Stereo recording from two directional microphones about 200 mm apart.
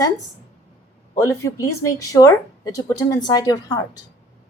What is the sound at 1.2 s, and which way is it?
A woman's voice, 15° left (ahead or behind).